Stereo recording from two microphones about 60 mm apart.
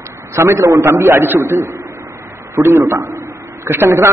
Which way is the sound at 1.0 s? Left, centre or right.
Right.